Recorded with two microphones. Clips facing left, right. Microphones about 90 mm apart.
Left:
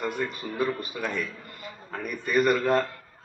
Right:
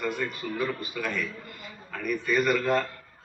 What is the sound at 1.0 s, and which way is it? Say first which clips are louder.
Speech: right 3 dB; 25° left (ahead or behind).